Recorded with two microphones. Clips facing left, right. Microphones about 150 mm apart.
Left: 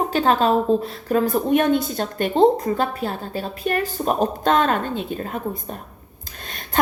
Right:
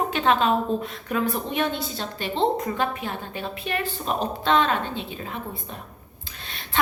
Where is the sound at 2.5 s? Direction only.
35° left (ahead or behind).